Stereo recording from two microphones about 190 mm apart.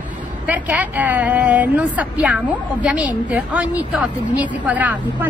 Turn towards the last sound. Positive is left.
turn(degrees=-10)  # may be behind; listen again after turning